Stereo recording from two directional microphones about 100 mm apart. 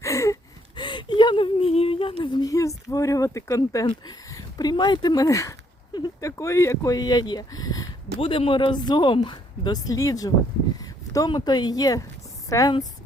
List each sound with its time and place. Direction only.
0.0 s gasp: 30° left (ahead or behind)
0.8 s a sound: 50° left (ahead or behind); by 3.8 s 35° left (ahead or behind)
3.8 s speech: 40° left (ahead or behind)
5.9 s speech: 45° left (ahead or behind)
6.2 s speech: 30° left (ahead or behind)
8.2 s a woman's voice: 65° left (ahead or behind); by 10.3 s 35° left (ahead or behind)
10.8 s a sound: 35° left (ahead or behind)
11.3 s speech: 45° left (ahead or behind)